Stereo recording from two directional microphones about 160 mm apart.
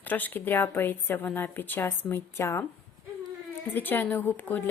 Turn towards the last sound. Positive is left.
turn(degrees=10)  # may be behind; listen again after turning